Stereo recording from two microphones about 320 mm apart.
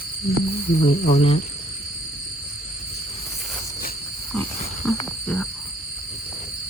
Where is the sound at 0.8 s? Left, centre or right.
Centre.